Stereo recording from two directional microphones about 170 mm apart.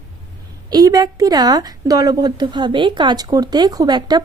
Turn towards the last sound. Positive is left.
turn(degrees=-25)  # may be behind; listen again after turning